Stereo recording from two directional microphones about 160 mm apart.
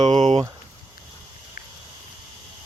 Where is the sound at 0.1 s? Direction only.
40° right (ahead or behind).